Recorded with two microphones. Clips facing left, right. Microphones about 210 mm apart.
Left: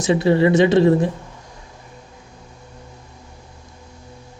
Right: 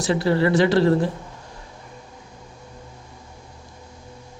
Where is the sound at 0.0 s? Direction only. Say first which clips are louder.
Left 4 dB; 20° left (ahead or behind).